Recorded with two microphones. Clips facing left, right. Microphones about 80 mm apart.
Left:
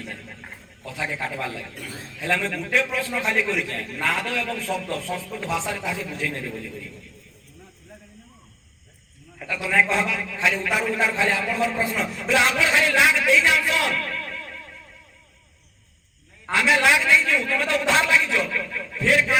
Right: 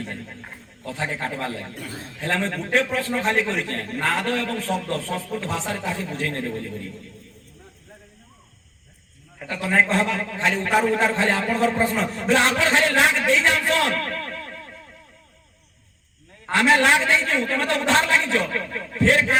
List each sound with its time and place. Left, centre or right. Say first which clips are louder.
0.0 s a man's voice: right 3 dB; right
9.5 s a man's voice: right 1 dB; right
16.5 s a man's voice: right 2 dB; right